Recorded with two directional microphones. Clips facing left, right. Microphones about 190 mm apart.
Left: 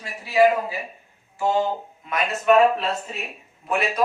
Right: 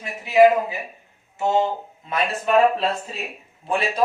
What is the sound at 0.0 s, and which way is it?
A man's voice, 20° right (ahead or behind).